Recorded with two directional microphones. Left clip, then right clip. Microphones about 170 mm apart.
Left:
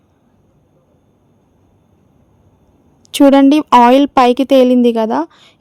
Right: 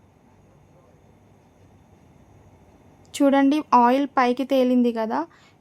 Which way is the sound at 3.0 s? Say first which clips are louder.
Left 11 dB; 50° left (ahead or behind).